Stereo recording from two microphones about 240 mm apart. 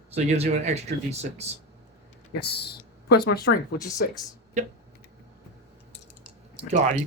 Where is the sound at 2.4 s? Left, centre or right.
Left.